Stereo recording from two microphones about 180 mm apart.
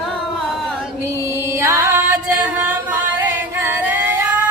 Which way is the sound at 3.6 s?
10° right (ahead or behind).